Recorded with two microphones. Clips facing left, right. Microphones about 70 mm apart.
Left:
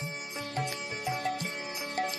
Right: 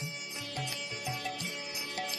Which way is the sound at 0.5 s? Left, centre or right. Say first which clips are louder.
Left 5 dB; left.